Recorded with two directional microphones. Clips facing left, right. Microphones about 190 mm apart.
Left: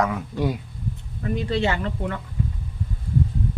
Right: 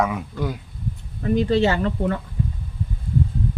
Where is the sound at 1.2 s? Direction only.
35° right (ahead or behind).